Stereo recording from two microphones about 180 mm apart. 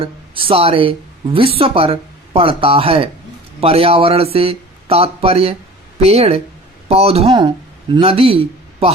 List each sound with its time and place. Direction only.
0.0 s a woman's voice: 30° right (ahead or behind)